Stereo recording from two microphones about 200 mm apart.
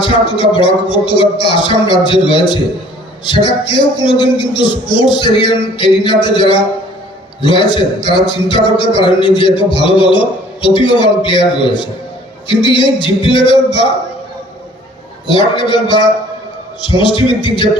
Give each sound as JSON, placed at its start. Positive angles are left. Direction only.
{"t": 0.0, "sound": "a man's voice", "side_deg": 25}
{"t": 15.3, "sound": "a man's voice", "side_deg": 25}